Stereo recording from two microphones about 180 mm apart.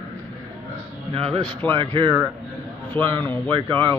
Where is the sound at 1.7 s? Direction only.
30° right (ahead or behind).